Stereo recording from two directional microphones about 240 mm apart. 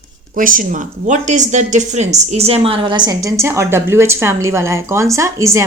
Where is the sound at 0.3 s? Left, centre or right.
Right.